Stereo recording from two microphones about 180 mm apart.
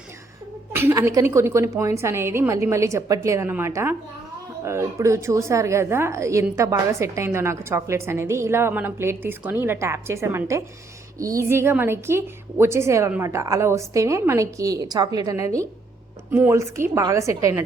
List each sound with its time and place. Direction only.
0.7 s a woman's voice: 15° right (ahead or behind)